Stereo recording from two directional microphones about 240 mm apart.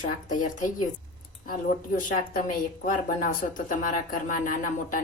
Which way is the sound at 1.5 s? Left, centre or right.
Left.